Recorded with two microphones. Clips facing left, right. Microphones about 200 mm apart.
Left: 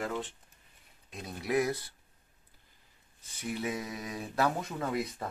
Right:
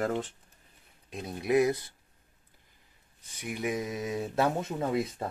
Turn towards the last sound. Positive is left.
turn(degrees=-25)  # may be behind; listen again after turning